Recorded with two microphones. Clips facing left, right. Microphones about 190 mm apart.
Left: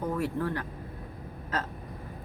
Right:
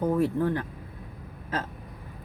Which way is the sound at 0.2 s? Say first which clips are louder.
Right 5 dB; 25° right (ahead or behind).